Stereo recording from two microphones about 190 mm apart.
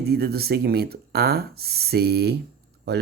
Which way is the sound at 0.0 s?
55° right (ahead or behind).